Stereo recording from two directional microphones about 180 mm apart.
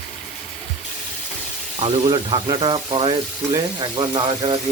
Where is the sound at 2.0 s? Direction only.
30° right (ahead or behind).